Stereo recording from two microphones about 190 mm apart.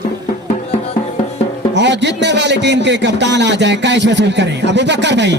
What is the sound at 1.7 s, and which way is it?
A man's voice, 65° right (ahead or behind).